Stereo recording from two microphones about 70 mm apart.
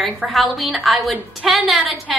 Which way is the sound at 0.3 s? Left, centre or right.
Centre.